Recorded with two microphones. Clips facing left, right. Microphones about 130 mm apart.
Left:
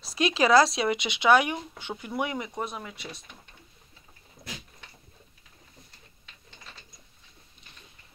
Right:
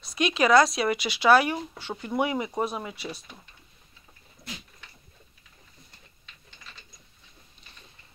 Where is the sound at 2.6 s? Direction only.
25° right (ahead or behind).